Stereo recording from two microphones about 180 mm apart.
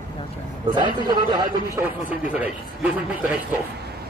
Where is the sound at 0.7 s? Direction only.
25° right (ahead or behind).